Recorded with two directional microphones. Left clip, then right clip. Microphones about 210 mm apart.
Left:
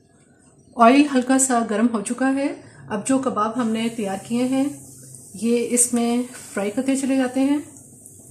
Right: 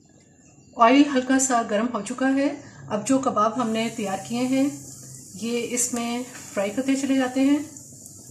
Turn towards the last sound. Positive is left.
turn(degrees=40)  # may be behind; listen again after turning